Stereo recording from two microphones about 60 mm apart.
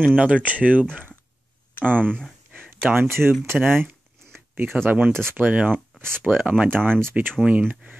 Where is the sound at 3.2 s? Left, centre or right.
Centre.